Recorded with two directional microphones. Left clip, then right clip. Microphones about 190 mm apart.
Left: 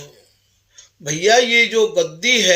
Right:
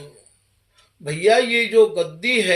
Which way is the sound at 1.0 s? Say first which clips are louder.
Left 2 dB; 35° left (ahead or behind).